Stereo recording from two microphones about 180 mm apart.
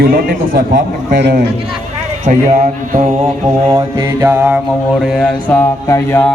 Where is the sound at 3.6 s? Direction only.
20° right (ahead or behind).